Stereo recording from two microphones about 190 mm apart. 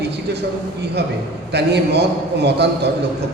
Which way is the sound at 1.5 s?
60° right (ahead or behind).